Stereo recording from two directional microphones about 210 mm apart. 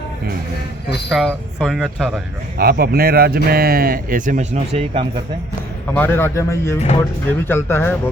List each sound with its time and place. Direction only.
1.1 s speech: centre (ahead or behind)
2.6 s speech: 45° right (ahead or behind); by 5.0 s 30° right (ahead or behind)
5.9 s a man's voice: 10° left (ahead or behind)